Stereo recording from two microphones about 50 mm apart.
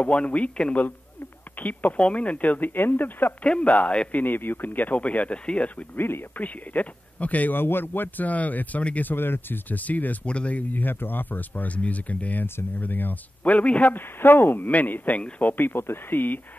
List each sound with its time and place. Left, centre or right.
0.0 s speech: left
1.6 s speech: left
3.4 s speech: left
4.1 s speech: left
5.9 s speech: left
6.4 s speech: left
7.5 s speech: left
9.1 s speech: left
10.7 s speech: left
12.4 s speech: left
12.8 s speech: left
13.9 s speech: left
14.7 s speech: left
15.5 s speech: left